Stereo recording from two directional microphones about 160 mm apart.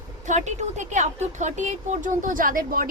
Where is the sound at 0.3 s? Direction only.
45° right (ahead or behind).